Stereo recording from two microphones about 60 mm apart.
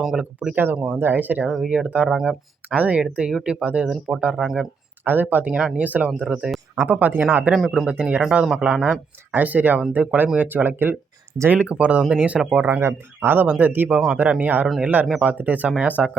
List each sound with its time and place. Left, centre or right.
0.0 s speech: centre
0.3 s speech: right
1.5 s speech: centre
1.7 s speech: right
2.0 s speech: centre
2.6 s speech: right
3.0 s speech: centre
4.4 s speech: centre
5.0 s speech: right
7.5 s speech: centre
7.9 s speech: centre; by 10.9 s right
11.4 s speech: right
12.6 s speech: right